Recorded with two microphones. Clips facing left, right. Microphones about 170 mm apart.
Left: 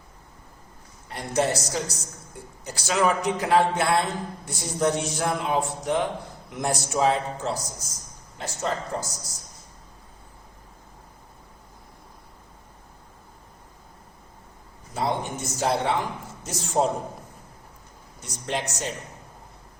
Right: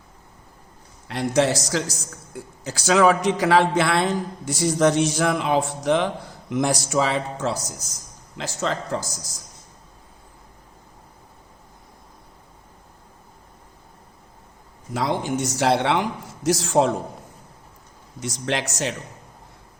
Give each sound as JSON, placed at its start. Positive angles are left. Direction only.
{"t": 1.0, "sound": "a man's voice", "side_deg": -90}
{"t": 15.2, "sound": "a man's voice", "side_deg": -80}
{"t": 18.2, "sound": "a man's voice", "side_deg": -90}